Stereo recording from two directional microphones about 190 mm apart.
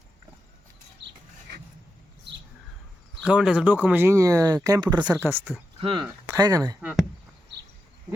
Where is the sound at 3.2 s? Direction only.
5° right (ahead or behind).